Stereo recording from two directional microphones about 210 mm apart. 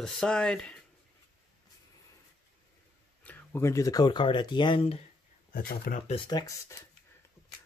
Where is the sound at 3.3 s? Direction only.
10° left (ahead or behind); by 5.0 s 25° left (ahead or behind).